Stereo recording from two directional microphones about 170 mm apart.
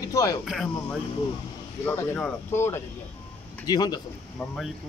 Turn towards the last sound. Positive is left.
turn(degrees=25)  # may be behind; listen again after turning